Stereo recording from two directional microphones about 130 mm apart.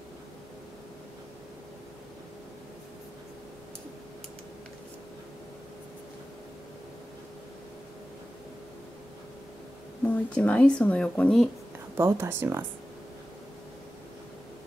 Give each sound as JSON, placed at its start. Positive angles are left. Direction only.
{"t": 10.0, "sound": "speech", "side_deg": 10}
{"t": 12.0, "sound": "speech", "side_deg": -20}